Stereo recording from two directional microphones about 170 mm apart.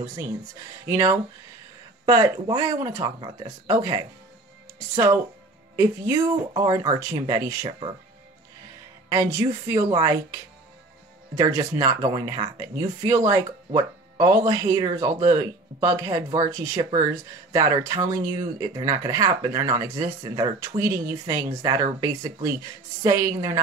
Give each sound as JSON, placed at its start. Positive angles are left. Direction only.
{"t": 0.0, "sound": "a woman's voice", "side_deg": -25}
{"t": 9.1, "sound": "a woman's voice", "side_deg": -15}